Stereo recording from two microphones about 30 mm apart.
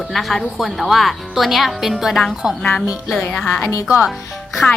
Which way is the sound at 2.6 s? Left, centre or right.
Left.